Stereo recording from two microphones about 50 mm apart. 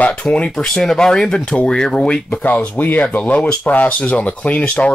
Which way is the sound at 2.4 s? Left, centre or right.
Left.